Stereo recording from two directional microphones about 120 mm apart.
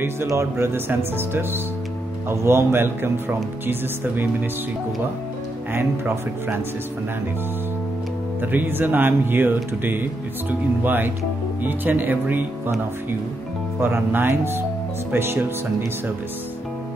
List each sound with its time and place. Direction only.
0.0 s speech: 20° right (ahead or behind)
5.7 s speech: 20° right (ahead or behind)
8.4 s speech: 15° right (ahead or behind)
13.7 s speech: 20° right (ahead or behind)